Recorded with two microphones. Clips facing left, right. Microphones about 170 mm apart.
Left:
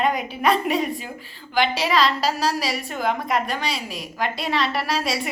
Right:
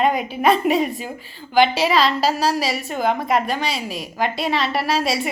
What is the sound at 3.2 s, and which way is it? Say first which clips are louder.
A woman's voice: right 3 dB; centre (ahead or behind).